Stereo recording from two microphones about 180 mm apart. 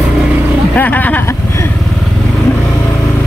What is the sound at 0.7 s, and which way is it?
Vehicle, 10° left (ahead or behind).